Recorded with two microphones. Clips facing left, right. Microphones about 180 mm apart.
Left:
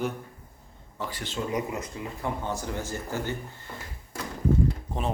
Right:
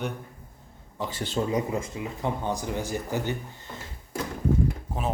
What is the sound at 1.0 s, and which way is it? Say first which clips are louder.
Speech: right 2 dB; 20° right (ahead or behind).